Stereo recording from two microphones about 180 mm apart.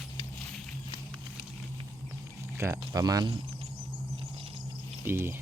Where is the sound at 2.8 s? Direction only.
20° right (ahead or behind).